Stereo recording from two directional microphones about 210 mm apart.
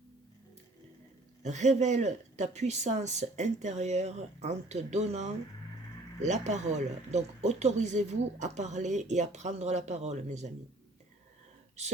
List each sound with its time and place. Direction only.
1.4 s speech: 35° right (ahead or behind)
11.8 s speech: 30° right (ahead or behind)